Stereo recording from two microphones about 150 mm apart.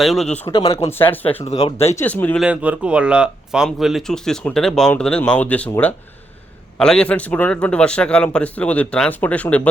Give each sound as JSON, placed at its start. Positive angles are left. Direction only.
{"t": 0.0, "sound": "speech", "side_deg": 0}
{"t": 0.5, "sound": "speech", "side_deg": 35}
{"t": 0.9, "sound": "a man's voice", "side_deg": 10}
{"t": 1.6, "sound": "speech", "side_deg": 45}
{"t": 2.0, "sound": "a man's voice", "side_deg": 15}
{"t": 2.4, "sound": "a man's voice", "side_deg": -10}